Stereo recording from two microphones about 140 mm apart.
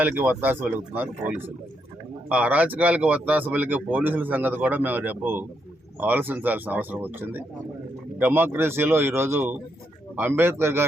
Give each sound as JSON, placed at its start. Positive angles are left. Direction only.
{"t": 0.0, "sound": "speech", "side_deg": -10}
{"t": 2.3, "sound": "speech", "side_deg": -10}